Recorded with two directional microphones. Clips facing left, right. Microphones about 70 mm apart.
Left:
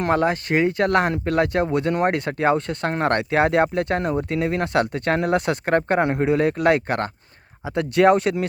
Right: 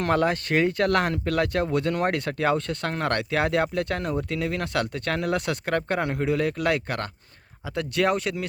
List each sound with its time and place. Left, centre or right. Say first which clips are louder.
0.0 s speech: left 3 dB; left